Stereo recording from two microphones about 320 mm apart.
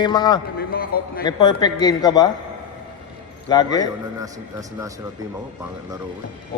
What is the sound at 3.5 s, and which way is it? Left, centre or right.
Speech, centre.